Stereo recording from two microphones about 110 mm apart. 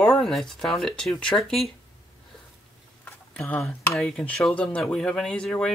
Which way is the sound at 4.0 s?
5° left (ahead or behind).